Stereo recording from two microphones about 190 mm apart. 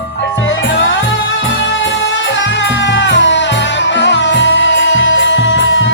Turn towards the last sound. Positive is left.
turn(degrees=75)  # may be behind; listen again after turning